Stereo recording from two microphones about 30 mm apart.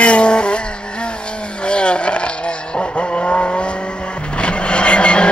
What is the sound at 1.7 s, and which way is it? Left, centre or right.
Vehicle, left.